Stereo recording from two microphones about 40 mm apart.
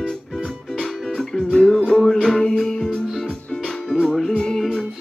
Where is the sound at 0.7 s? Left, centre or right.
Centre.